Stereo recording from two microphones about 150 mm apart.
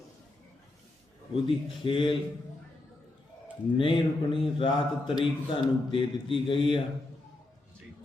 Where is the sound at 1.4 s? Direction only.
35° left (ahead or behind).